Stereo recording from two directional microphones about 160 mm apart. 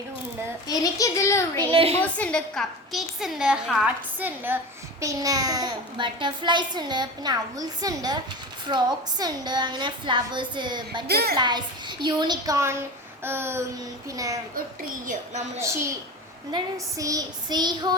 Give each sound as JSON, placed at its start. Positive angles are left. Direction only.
{"t": 0.7, "sound": "a child's voice", "side_deg": 20}
{"t": 1.7, "sound": "a woman's voice", "side_deg": -35}
{"t": 2.0, "sound": "a woman's voice", "side_deg": 10}
{"t": 11.1, "sound": "a woman's voice", "side_deg": -80}
{"t": 11.3, "sound": "a woman's voice", "side_deg": -25}
{"t": 13.2, "sound": "a sound", "side_deg": -15}
{"t": 15.0, "sound": "a woman's voice", "side_deg": -50}
{"t": 15.5, "sound": "a sound", "side_deg": -15}
{"t": 16.5, "sound": "a woman's voice", "side_deg": -25}